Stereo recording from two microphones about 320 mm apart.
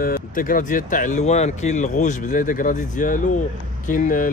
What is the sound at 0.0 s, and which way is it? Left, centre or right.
Speech, left.